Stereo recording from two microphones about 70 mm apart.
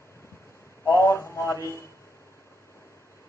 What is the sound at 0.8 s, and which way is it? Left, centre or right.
Speech, left.